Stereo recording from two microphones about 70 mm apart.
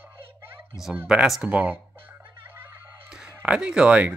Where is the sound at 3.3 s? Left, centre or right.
Centre.